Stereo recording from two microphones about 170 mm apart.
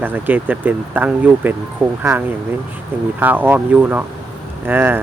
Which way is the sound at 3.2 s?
10° right (ahead or behind).